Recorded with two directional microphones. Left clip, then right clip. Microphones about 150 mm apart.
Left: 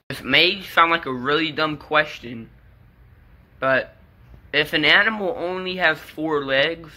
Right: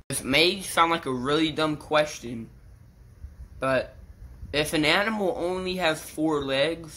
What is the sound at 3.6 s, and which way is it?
A woman's voice, 15° right (ahead or behind).